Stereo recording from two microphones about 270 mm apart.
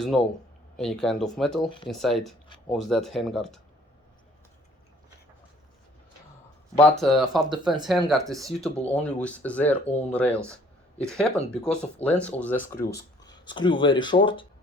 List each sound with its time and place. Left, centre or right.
0.1 s speech: centre
6.7 s speech: centre
11.5 s speech: centre